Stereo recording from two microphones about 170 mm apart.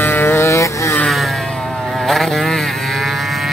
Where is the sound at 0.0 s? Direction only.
15° left (ahead or behind).